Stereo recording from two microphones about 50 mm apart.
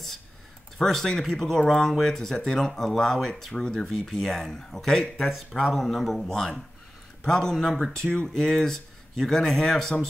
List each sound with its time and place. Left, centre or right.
0.7 s speech: centre
5.6 s speech: centre
5.9 s speech: centre